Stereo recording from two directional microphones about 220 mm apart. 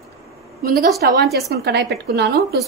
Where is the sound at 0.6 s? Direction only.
45° right (ahead or behind).